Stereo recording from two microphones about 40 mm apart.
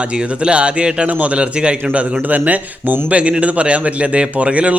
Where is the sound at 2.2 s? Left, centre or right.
Right.